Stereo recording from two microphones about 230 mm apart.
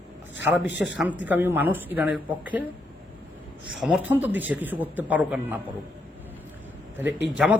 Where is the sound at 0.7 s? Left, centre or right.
Left.